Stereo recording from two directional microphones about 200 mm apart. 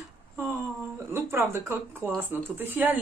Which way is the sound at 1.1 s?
10° right (ahead or behind).